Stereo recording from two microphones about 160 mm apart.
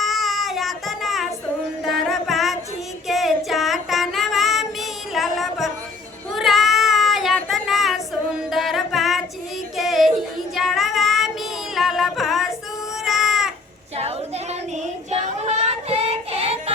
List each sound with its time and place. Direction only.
0.0 s child singing: centre (ahead or behind)
1.8 s music: centre (ahead or behind)
3.1 s child singing: centre (ahead or behind)
11.7 s music: centre (ahead or behind)
13.1 s a sound: centre (ahead or behind)
13.9 s a sound: 40° right (ahead or behind)
15.1 s child singing: 45° right (ahead or behind)